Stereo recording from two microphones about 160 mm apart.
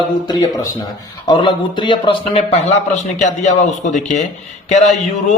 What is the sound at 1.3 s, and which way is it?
A man's voice, 30° left (ahead or behind).